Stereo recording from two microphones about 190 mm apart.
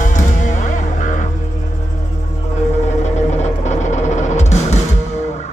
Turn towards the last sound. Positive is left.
turn(degrees=35)  # may be behind; listen again after turning